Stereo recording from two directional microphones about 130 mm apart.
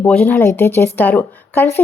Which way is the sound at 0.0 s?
10° left (ahead or behind).